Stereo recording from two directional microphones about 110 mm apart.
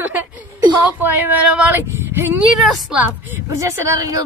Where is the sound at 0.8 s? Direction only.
15° right (ahead or behind).